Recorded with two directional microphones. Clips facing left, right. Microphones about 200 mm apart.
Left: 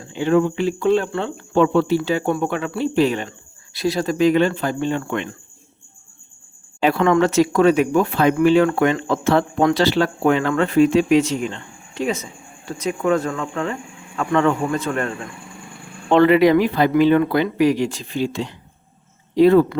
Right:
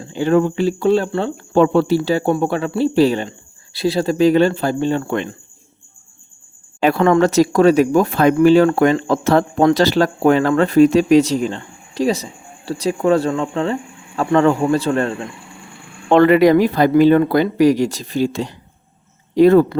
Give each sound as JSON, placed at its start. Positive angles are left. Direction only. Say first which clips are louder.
{"t": 0.0, "sound": "speech", "louder": "right 2 dB", "side_deg": -40}
{"t": 6.7, "sound": "speech", "louder": "right 3 dB", "side_deg": -45}
{"t": 16.1, "sound": "speech", "louder": "right 2 dB", "side_deg": -45}